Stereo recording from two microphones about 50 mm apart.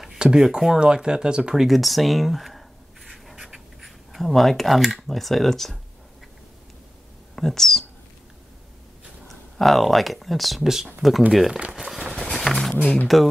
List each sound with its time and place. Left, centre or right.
0.0 s speech: centre
1.6 s speech: centre
7.3 s speech: centre
9.3 s speech: centre
11.7 s a sound: centre
12.1 s horse: centre
12.8 s speech: left